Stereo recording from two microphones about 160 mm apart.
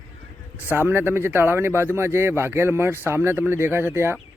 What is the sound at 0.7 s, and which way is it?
Speech, 15° right (ahead or behind).